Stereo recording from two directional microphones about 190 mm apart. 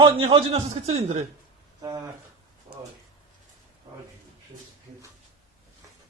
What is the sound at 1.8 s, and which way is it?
Speech, 20° right (ahead or behind).